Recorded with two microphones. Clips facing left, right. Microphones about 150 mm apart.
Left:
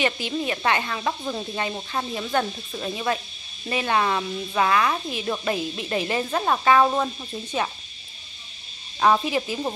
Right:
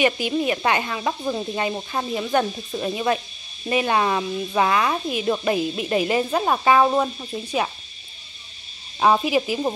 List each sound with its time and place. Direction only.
0.0 s speech: 15° right (ahead or behind)
9.0 s speech: 15° right (ahead or behind)